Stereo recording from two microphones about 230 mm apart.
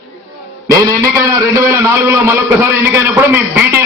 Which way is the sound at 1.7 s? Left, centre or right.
Centre.